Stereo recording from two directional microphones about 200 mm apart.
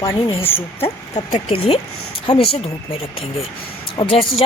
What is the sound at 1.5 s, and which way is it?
A woman's voice, 30° left (ahead or behind).